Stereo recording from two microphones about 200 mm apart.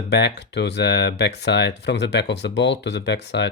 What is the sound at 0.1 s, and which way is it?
Speech, 60° left (ahead or behind).